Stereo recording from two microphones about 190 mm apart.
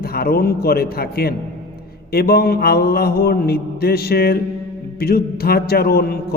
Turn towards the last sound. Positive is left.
turn(degrees=55)  # may be behind; listen again after turning